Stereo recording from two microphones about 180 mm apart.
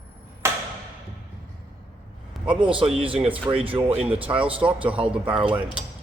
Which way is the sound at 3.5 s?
15° right (ahead or behind).